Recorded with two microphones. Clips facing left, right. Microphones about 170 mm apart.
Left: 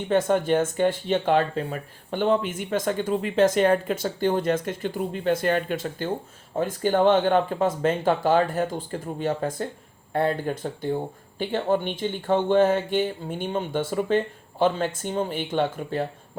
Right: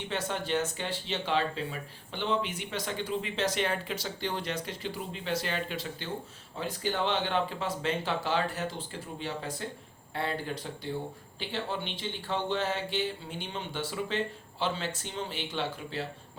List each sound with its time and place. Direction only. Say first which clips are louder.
0.1 s speech: left 11 dB; 50° left (ahead or behind)